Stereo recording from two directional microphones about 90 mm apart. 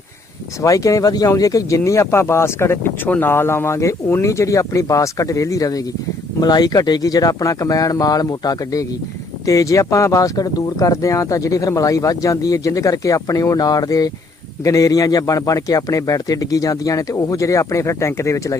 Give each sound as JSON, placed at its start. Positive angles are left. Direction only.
{"t": 0.6, "sound": "speech", "side_deg": 40}